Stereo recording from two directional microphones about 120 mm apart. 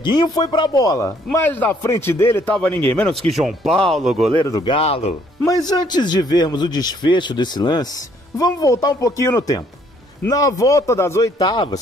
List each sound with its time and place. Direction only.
0.0 s a man's voice: 35° left (ahead or behind); by 4.3 s centre (ahead or behind)
4.6 s speech: 50° left (ahead or behind)
5.4 s a man's voice: 30° left (ahead or behind)